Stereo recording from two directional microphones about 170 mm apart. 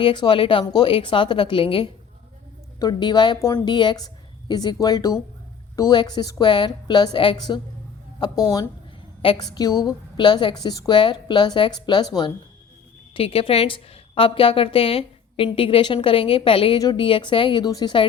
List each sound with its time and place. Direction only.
0.0 s a woman's voice: 30° left (ahead or behind)